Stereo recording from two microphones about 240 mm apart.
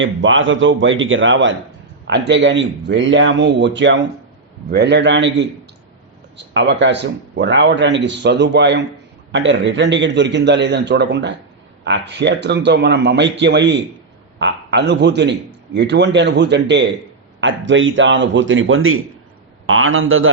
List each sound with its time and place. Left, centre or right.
0.0 s a man's voice: right